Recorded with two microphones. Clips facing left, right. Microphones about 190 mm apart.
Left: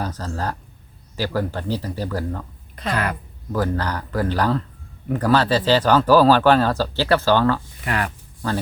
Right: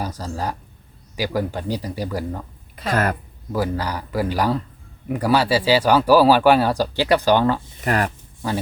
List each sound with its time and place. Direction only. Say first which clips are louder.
0.0 s speech: even; 10° right (ahead or behind)
2.9 s speech: right 3 dB; 45° right (ahead or behind)
3.5 s speech: even; 10° right (ahead or behind)
7.9 s speech: right 4 dB; 40° right (ahead or behind)